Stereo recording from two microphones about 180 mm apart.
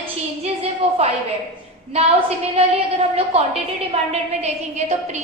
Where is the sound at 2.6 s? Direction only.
35° right (ahead or behind).